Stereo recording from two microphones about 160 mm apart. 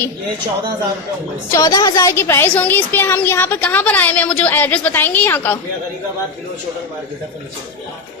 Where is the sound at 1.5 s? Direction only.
25° left (ahead or behind).